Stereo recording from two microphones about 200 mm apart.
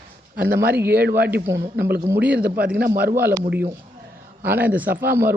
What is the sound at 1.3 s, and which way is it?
Speech, 15° right (ahead or behind).